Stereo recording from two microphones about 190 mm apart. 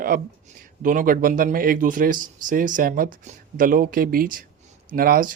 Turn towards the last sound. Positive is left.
turn(degrees=-50)  # may be behind; listen again after turning